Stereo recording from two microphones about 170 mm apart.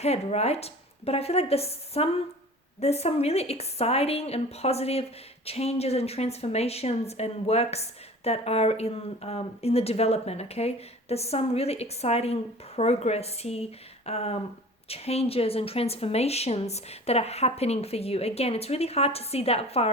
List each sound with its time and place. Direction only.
0.0 s a woman's voice: 40° left (ahead or behind)